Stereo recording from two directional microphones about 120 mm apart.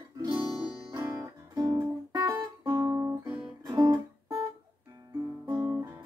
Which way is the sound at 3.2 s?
5° right (ahead or behind).